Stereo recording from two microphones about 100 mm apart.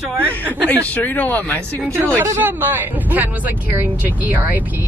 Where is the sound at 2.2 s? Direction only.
25° right (ahead or behind).